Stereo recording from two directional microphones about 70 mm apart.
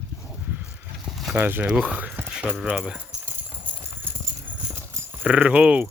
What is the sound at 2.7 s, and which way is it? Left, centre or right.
Speech, centre.